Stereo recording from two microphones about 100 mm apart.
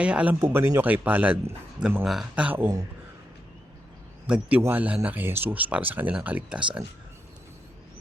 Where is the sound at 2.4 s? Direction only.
20° right (ahead or behind).